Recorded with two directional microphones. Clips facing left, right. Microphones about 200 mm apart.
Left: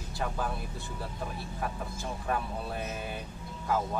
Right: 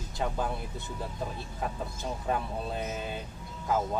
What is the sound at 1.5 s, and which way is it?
Speech, 20° right (ahead or behind).